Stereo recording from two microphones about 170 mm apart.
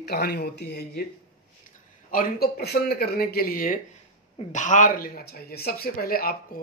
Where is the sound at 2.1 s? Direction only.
60° left (ahead or behind).